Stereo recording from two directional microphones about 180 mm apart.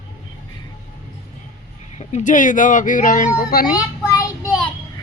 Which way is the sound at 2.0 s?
40° left (ahead or behind).